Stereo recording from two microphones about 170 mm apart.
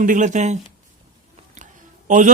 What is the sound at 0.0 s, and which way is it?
Speech, 50° right (ahead or behind).